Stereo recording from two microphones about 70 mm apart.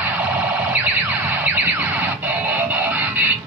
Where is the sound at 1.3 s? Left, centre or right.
Right.